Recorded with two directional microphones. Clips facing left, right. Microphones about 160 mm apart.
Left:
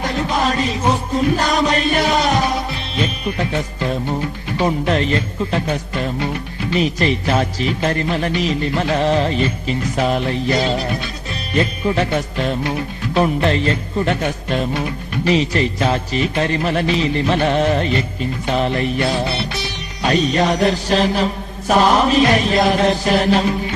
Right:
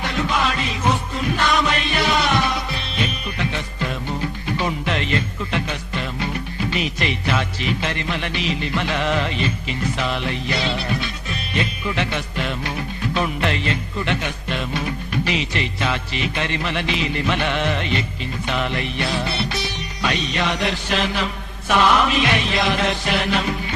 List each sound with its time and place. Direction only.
0.0 s music: 40° left (ahead or behind)
4.6 s music: 40° left (ahead or behind)